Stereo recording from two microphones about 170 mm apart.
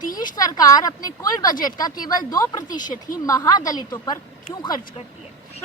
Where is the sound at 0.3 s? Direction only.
20° left (ahead or behind).